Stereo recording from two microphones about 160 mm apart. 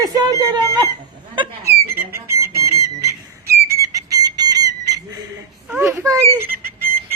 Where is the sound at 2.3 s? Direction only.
15° right (ahead or behind).